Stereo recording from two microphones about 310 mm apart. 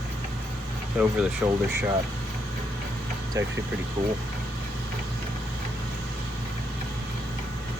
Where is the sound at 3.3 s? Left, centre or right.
Centre.